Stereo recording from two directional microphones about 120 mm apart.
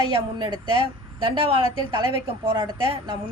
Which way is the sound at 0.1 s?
40° right (ahead or behind).